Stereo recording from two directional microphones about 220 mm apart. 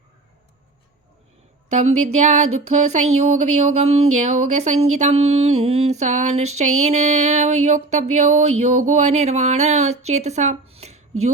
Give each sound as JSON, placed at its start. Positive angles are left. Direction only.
{"t": 1.7, "sound": "music", "side_deg": -30}
{"t": 3.2, "sound": "speech", "side_deg": -30}
{"t": 6.7, "sound": "music", "side_deg": -30}